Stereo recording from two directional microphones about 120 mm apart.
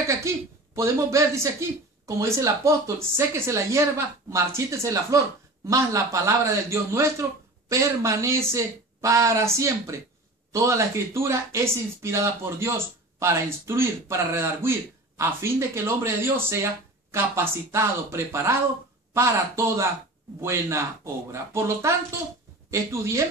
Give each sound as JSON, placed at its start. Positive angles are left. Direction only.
{"t": 0.3, "sound": "speech", "side_deg": -25}